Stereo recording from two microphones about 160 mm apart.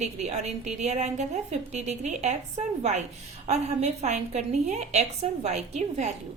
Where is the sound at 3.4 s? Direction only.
45° right (ahead or behind).